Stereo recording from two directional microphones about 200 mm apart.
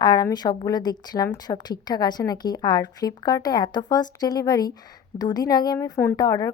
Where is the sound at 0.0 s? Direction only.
20° left (ahead or behind).